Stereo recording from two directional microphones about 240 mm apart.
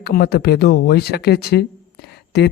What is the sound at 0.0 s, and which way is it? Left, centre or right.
Speech, left.